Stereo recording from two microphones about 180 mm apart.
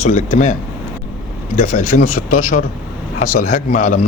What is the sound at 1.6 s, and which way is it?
Speech, 50° left (ahead or behind).